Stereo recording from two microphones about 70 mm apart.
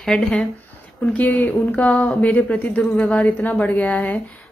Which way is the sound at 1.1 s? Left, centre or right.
Left.